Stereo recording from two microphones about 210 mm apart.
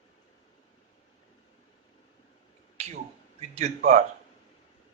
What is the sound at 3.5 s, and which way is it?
Speech, 30° right (ahead or behind).